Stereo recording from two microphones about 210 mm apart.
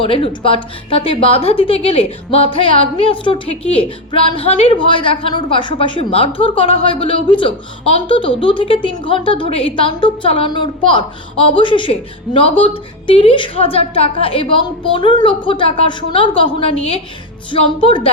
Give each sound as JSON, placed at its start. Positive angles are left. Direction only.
{"t": 0.0, "sound": "a woman's voice", "side_deg": 25}